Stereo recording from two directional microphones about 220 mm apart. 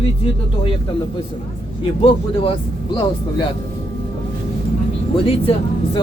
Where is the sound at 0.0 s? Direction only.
25° left (ahead or behind).